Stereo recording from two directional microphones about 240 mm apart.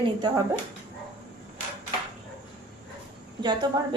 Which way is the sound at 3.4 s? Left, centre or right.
Centre.